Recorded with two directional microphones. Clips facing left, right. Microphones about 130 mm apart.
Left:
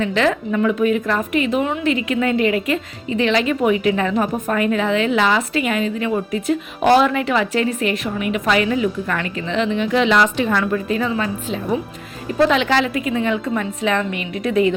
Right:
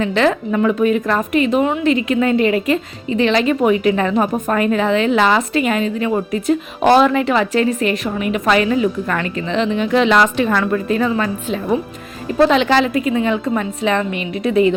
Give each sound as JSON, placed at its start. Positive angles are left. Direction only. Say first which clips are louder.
{"t": 0.0, "sound": "a woman's voice", "louder": "right 2 dB", "side_deg": -35}
{"t": 12.5, "sound": "a woman's voice", "louder": "right 3 dB", "side_deg": -35}